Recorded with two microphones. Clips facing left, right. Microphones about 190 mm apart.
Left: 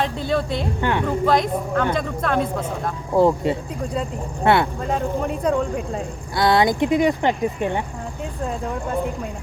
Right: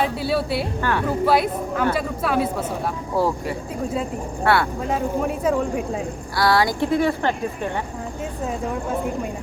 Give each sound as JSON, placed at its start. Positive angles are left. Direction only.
{"t": 0.0, "sound": "a man's voice", "side_deg": -5}
{"t": 0.8, "sound": "speech", "side_deg": 20}
{"t": 1.0, "sound": "a man's voice", "side_deg": -5}
{"t": 3.2, "sound": "speech", "side_deg": 20}
{"t": 4.9, "sound": "speech", "side_deg": -5}
{"t": 6.3, "sound": "speech", "side_deg": 20}